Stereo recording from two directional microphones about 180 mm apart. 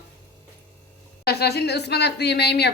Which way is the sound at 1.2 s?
60° left (ahead or behind).